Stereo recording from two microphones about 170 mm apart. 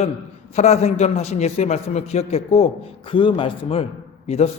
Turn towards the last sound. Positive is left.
turn(degrees=40)  # may be behind; listen again after turning